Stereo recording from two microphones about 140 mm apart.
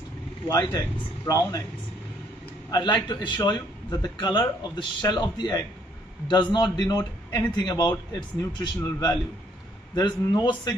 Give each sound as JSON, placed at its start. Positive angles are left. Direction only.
{"t": 0.5, "sound": "a man's voice", "side_deg": 30}
{"t": 2.7, "sound": "a man's voice", "side_deg": 30}